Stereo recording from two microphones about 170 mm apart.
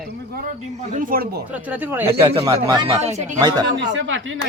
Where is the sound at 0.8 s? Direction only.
50° right (ahead or behind).